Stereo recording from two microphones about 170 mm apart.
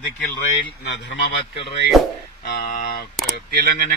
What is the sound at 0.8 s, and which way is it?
Speech, 90° left.